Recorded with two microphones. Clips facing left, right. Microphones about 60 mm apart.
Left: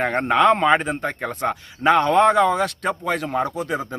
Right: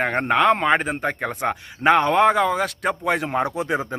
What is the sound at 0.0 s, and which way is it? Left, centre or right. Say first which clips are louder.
A man's voice: left 1 dB; centre.